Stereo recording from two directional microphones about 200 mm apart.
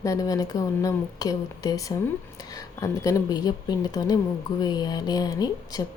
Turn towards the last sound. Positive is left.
turn(degrees=20)  # may be behind; listen again after turning